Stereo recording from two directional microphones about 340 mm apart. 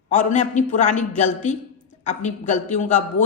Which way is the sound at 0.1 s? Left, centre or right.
Left.